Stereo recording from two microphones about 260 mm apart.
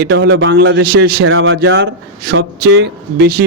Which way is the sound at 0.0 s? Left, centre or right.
Right.